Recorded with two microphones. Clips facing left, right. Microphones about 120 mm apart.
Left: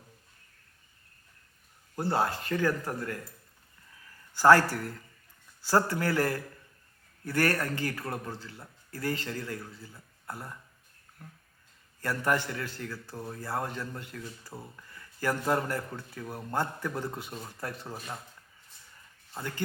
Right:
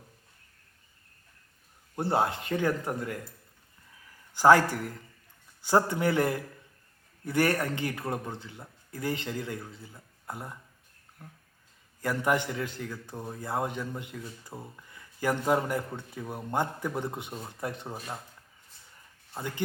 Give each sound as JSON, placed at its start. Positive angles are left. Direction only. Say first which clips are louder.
{"t": 2.0, "sound": "a man's voice", "louder": "right 1 dB", "side_deg": -20}
{"t": 19.4, "sound": "speech", "louder": "right 2 dB", "side_deg": -20}